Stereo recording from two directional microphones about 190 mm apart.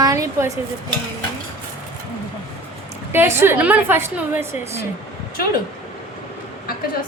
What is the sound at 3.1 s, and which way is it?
A woman's voice, 10° right (ahead or behind).